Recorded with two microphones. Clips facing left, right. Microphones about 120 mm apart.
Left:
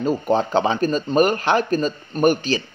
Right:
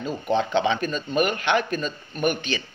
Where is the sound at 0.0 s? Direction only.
40° left (ahead or behind).